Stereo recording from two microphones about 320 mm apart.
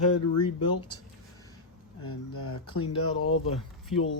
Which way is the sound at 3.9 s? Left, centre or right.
Left.